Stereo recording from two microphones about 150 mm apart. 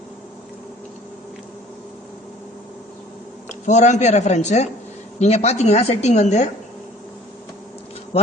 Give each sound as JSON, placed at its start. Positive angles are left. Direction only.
{"t": 3.7, "sound": "a woman's voice", "side_deg": 50}